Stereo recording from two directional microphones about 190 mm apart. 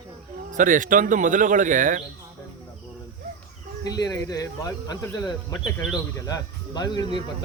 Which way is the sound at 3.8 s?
20° left (ahead or behind).